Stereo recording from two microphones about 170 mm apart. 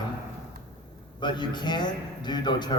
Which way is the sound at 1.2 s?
25° left (ahead or behind).